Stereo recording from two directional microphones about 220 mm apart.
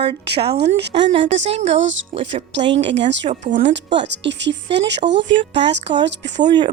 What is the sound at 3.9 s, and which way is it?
Speech, 50° right (ahead or behind).